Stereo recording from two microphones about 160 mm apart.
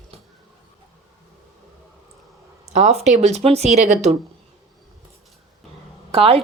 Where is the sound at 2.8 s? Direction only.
45° right (ahead or behind).